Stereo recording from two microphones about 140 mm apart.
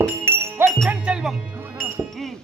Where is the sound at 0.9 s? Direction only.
5° right (ahead or behind).